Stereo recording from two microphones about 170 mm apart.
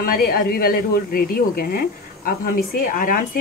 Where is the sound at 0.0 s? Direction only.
60° left (ahead or behind).